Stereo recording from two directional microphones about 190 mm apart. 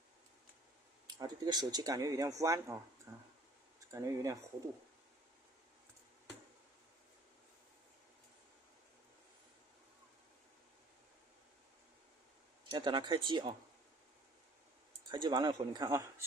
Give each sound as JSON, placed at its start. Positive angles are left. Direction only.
{"t": 1.0, "sound": "speech", "side_deg": -20}
{"t": 12.6, "sound": "speech", "side_deg": -25}
{"t": 15.1, "sound": "speech", "side_deg": -25}